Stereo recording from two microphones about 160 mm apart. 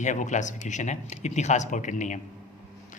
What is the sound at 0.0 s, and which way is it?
Speech, 50° left (ahead or behind).